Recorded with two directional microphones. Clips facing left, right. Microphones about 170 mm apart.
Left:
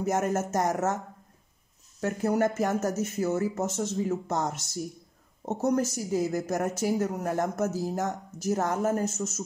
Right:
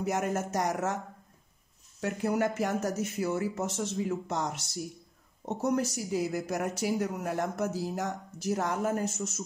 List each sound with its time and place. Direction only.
0.0 s speech: 40° left (ahead or behind)
2.0 s speech: 45° left (ahead or behind)